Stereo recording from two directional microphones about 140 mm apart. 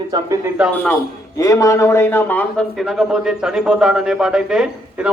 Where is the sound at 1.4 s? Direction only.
25° left (ahead or behind).